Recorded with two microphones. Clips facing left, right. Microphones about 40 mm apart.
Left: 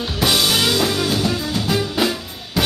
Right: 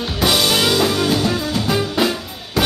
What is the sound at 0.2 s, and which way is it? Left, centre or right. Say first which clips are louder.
Music: right 1 dB; centre.